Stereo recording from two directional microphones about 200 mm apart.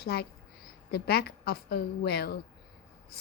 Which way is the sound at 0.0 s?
50° left (ahead or behind).